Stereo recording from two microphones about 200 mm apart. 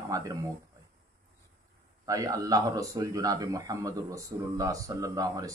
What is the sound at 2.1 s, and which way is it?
Speech, 15° right (ahead or behind).